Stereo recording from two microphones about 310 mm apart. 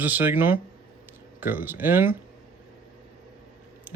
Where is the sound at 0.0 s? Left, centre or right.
Centre.